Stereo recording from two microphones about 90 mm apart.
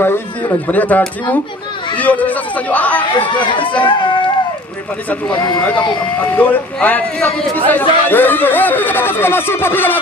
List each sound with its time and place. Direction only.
0.0 s a man's voice: 25° left (ahead or behind)
3.3 s speech: 65° left (ahead or behind)
5.6 s a man's voice: 15° left (ahead or behind)